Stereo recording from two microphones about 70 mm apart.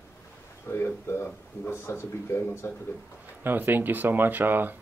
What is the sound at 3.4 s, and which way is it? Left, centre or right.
Speech, right.